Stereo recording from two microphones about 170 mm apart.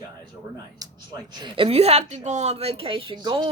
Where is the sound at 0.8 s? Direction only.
20° right (ahead or behind).